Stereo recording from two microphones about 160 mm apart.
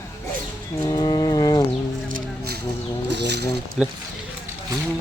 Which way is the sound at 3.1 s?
90° right.